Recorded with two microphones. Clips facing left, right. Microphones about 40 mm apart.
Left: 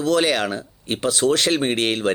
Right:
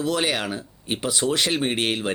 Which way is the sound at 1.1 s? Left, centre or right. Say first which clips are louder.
Left 5 dB; left.